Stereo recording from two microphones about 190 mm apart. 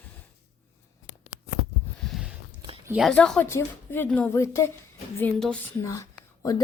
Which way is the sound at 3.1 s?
5° left (ahead or behind).